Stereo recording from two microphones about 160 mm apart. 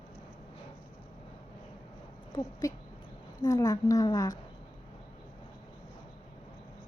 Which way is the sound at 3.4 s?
25° left (ahead or behind).